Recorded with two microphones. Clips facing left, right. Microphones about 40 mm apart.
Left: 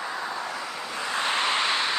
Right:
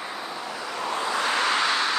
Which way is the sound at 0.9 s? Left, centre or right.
Right.